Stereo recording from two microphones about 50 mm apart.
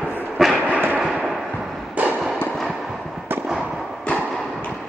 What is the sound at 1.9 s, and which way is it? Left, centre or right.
Fireworks, right.